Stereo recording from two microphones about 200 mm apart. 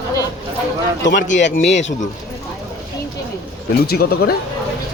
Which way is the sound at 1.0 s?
65° left (ahead or behind).